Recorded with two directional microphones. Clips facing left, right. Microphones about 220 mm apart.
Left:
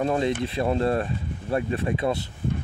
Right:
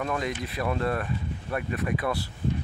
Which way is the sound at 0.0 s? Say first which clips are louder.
Left 6 dB; 30° left (ahead or behind).